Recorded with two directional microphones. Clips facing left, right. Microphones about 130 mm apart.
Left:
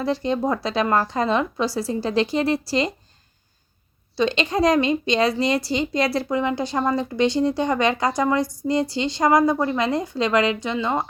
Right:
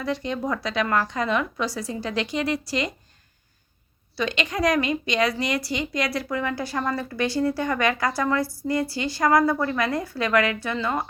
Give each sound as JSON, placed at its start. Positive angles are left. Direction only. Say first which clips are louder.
{"t": 0.0, "sound": "a woman's voice", "louder": "left 5 dB", "side_deg": 30}
{"t": 4.2, "sound": "a woman's voice", "louder": "left 5 dB", "side_deg": 30}